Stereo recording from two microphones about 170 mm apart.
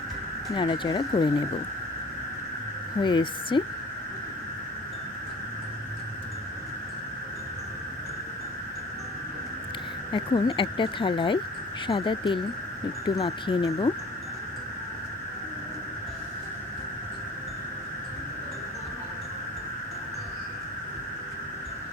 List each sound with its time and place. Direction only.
0.5 s speech: 30° left (ahead or behind)
3.0 s speech: 25° left (ahead or behind)
10.1 s speech: 30° left (ahead or behind)